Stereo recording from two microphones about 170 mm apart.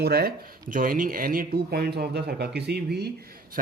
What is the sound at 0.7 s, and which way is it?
Speech, 55° right (ahead or behind).